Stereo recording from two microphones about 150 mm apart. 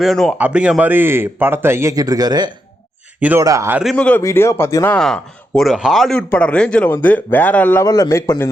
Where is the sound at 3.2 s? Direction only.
10° right (ahead or behind).